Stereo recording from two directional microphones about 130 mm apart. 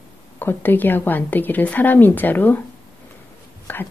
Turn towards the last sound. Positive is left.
turn(degrees=15)  # may be behind; listen again after turning